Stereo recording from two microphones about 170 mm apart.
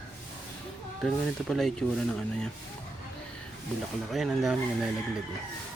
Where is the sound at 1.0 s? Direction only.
Centre (ahead or behind).